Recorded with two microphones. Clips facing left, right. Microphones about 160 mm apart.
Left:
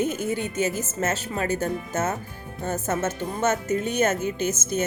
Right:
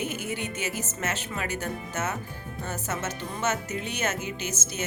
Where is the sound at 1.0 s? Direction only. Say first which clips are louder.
Left 7 dB; 40° left (ahead or behind).